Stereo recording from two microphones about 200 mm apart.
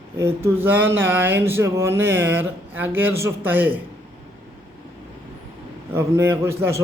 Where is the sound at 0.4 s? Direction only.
10° right (ahead or behind).